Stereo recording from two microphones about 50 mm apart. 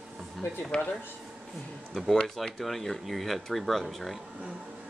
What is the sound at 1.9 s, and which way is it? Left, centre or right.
Speech, centre.